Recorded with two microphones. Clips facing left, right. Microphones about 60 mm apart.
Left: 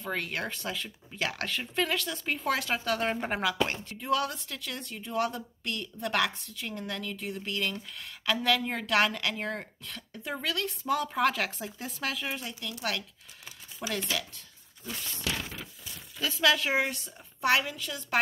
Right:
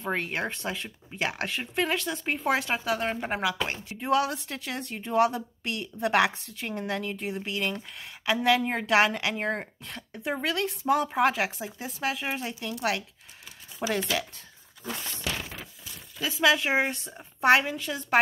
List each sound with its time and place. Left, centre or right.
0.0 s a woman's voice: right
2.9 s a woman's voice: centre
4.0 s a woman's voice: right
5.3 s a woman's voice: centre
6.5 s a woman's voice: right
7.4 s a woman's voice: centre
12.3 s a woman's voice: right
13.7 s speech: right
16.2 s a woman's voice: centre; by 18.2 s right